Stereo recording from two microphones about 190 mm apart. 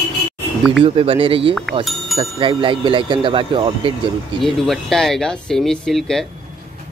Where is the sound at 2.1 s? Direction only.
25° right (ahead or behind).